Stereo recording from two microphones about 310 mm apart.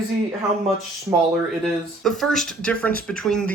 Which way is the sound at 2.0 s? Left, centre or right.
Centre.